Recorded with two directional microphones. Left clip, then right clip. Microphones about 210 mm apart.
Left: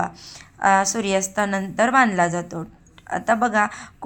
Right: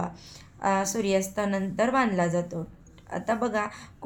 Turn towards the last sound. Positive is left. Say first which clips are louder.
# left 9 dB
turn(degrees=25)  # may be behind; listen again after turning